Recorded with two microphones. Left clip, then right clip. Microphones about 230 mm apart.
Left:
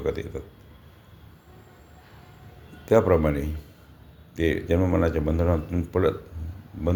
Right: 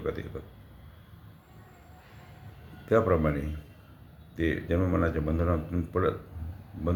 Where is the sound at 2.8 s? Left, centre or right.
Left.